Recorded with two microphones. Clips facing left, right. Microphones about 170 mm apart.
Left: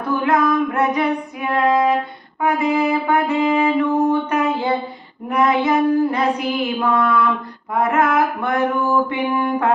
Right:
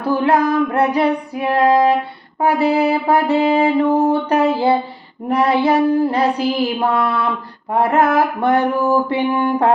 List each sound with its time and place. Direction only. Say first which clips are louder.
0.0 s music: right 2 dB; 35° right (ahead or behind)